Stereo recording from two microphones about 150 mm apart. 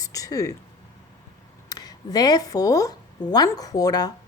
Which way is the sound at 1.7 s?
25° left (ahead or behind).